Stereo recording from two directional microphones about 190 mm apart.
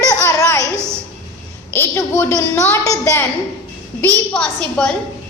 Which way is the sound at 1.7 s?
10° left (ahead or behind).